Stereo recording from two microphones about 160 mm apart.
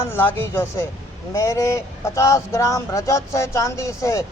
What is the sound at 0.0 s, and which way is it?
A woman's voice, 15° left (ahead or behind).